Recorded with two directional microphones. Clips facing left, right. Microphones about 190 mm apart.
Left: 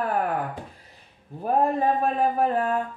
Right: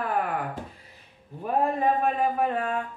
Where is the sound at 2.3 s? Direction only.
40° left (ahead or behind).